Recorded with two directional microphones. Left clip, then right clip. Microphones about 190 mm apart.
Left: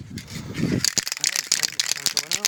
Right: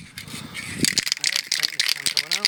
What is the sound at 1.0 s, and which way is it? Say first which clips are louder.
Rattle: right 2 dB; 60° left (ahead or behind).